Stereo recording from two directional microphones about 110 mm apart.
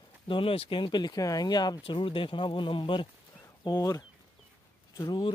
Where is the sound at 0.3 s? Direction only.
55° left (ahead or behind).